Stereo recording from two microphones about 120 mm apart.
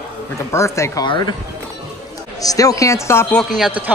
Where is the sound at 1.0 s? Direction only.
40° left (ahead or behind).